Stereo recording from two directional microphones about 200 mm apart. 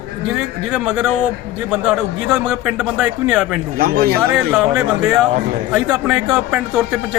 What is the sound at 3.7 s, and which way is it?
Speech, 50° right (ahead or behind).